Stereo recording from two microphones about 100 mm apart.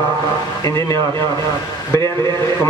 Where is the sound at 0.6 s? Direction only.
30° left (ahead or behind).